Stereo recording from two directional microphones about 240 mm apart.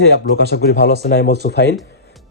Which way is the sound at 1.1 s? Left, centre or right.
Left.